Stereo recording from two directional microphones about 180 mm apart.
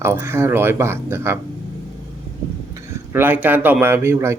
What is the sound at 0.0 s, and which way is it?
Speech, 15° right (ahead or behind).